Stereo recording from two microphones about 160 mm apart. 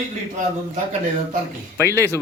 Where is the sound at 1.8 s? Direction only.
20° right (ahead or behind).